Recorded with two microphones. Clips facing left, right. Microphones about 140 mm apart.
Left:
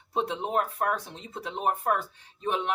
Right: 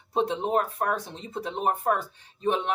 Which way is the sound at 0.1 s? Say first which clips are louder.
Right 4 dB; 30° right (ahead or behind).